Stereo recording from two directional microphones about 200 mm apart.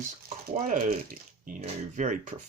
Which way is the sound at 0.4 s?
45° right (ahead or behind).